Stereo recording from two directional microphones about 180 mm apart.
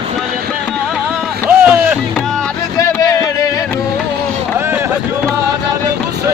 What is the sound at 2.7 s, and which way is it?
Music, 15° left (ahead or behind).